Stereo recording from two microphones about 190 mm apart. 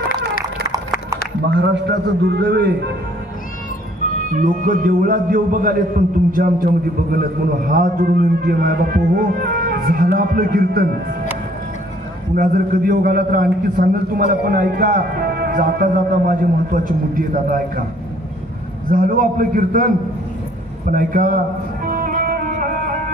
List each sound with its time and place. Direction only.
1.5 s a man's voice: 65° right (ahead or behind)
4.3 s a man's voice: 45° right (ahead or behind)
12.4 s a man's voice: 50° right (ahead or behind)
18.9 s a man's voice: 45° right (ahead or behind)
20.9 s a man's voice: 45° right (ahead or behind)
21.8 s music: 50° right (ahead or behind)